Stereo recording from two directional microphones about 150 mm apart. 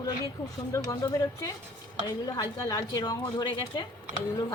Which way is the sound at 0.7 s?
20° left (ahead or behind).